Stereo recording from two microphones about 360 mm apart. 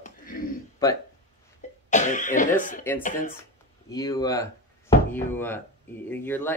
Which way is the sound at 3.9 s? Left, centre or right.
Centre.